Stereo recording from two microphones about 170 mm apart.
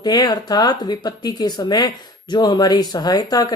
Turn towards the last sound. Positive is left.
turn(degrees=25)  # may be behind; listen again after turning